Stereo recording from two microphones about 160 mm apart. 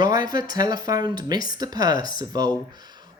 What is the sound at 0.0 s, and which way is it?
Speech, 25° right (ahead or behind).